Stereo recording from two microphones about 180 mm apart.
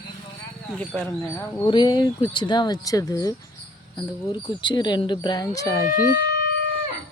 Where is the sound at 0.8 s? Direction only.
10° left (ahead or behind).